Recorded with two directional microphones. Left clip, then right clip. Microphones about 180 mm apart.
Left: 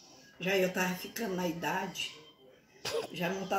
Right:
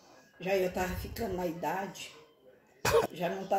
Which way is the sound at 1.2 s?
15° left (ahead or behind).